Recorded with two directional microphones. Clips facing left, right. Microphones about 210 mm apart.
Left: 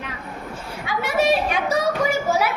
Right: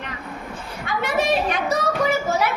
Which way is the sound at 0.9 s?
5° left (ahead or behind).